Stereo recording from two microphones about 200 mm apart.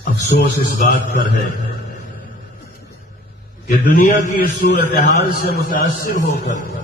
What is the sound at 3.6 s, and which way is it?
A man's voice, 40° left (ahead or behind).